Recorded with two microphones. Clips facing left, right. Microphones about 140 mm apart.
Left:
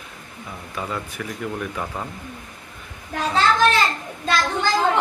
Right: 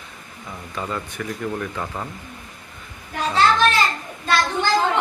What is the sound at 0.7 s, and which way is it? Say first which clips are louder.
Speech: right 1 dB; 5° left (ahead or behind).